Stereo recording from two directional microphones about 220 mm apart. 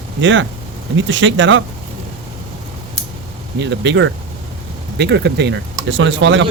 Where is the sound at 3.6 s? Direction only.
55° right (ahead or behind).